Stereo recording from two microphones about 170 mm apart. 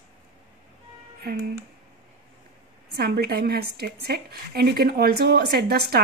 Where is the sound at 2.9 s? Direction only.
65° right (ahead or behind).